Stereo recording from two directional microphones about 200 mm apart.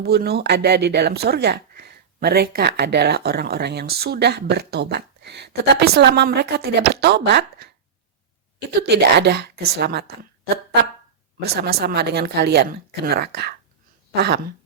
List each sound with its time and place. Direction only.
0.0 s speech: 55° right (ahead or behind)
8.9 s speech: 55° right (ahead or behind)
11.4 s a woman's voice: 55° right (ahead or behind)